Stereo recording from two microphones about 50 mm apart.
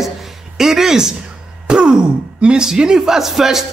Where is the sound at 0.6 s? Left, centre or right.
Centre.